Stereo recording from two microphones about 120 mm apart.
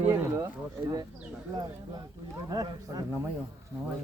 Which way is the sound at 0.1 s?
20° right (ahead or behind).